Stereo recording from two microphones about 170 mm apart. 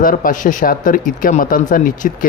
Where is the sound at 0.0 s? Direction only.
55° left (ahead or behind).